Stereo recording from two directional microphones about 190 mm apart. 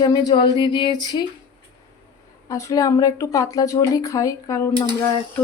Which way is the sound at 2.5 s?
15° left (ahead or behind).